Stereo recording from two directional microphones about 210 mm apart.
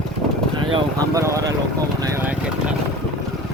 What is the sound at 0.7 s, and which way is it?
Vehicle, 15° right (ahead or behind).